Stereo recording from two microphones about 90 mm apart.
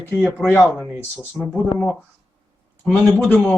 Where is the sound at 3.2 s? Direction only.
15° left (ahead or behind).